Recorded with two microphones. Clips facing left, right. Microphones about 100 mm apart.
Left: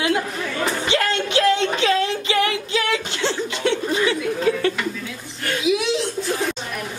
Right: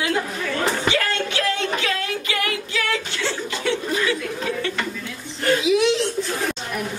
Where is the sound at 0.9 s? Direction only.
20° left (ahead or behind).